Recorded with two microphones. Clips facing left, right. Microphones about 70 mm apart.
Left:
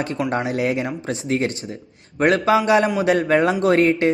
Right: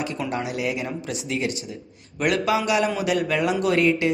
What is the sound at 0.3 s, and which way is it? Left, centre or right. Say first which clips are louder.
Speech: left 6 dB; left.